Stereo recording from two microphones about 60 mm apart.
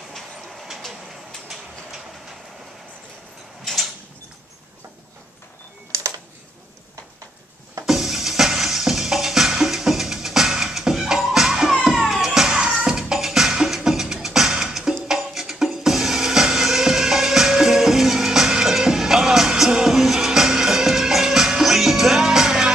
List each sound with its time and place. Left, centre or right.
5.9 s typing: right
7.8 s music: centre